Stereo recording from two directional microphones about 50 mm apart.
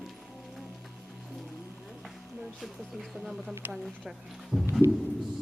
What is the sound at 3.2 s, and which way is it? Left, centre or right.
Speech, centre.